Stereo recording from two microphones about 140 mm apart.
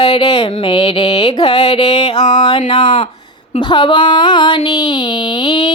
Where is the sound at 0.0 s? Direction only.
35° left (ahead or behind).